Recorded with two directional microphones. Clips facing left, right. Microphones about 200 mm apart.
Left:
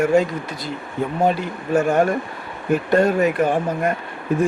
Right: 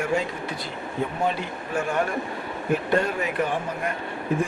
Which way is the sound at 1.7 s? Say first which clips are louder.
Left 8 dB; 40° left (ahead or behind).